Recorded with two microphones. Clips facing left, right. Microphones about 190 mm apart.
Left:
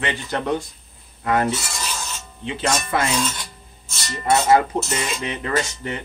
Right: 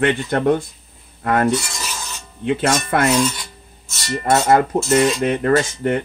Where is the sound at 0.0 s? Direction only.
55° right (ahead or behind).